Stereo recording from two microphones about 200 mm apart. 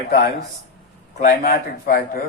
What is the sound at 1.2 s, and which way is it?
Speech, 45° left (ahead or behind).